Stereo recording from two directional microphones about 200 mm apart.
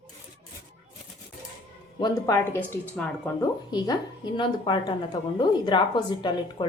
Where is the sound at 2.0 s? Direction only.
15° left (ahead or behind).